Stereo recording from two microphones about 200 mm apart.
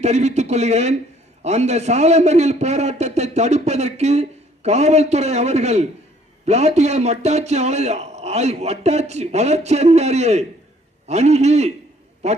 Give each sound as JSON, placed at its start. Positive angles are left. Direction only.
{"t": 0.0, "sound": "a man's voice", "side_deg": -35}